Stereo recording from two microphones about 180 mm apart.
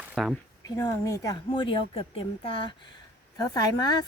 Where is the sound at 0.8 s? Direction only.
15° left (ahead or behind).